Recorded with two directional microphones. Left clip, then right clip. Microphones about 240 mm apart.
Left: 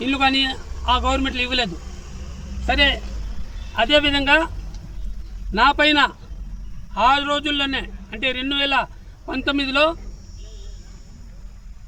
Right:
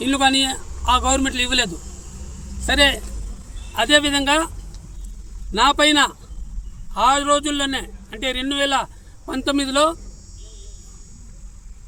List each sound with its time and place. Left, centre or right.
0.0 s a man's voice: centre
5.5 s a man's voice: centre